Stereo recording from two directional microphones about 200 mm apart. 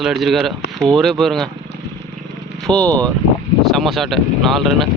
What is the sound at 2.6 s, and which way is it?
Speech, 5° left (ahead or behind).